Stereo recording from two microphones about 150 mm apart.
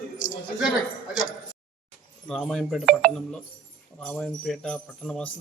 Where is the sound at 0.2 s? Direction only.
60° left (ahead or behind).